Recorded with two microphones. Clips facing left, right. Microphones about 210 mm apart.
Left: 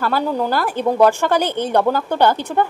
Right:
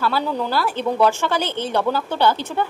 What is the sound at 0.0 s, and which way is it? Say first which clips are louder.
A woman's voice: left 3 dB; 50° left (ahead or behind).